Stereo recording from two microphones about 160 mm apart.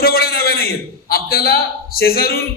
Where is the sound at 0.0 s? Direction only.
70° left (ahead or behind).